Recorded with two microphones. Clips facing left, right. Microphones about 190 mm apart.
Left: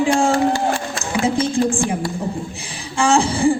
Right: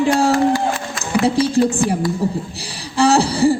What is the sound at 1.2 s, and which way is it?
Speech, 35° right (ahead or behind).